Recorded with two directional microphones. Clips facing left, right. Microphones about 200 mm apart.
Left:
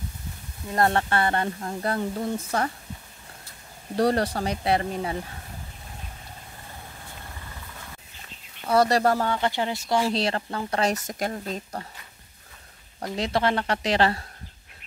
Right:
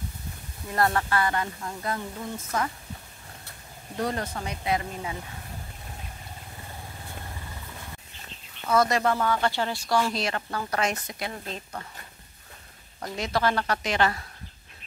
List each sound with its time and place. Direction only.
0.7 s speech: 30° left (ahead or behind)
3.9 s speech: 35° left (ahead or behind)
8.6 s speech: 35° left (ahead or behind)
9.3 s a woman's voice: 20° left (ahead or behind)
10.0 s speech: 30° left (ahead or behind)
11.1 s speech: 45° left (ahead or behind)
13.1 s a woman's voice: 30° left (ahead or behind)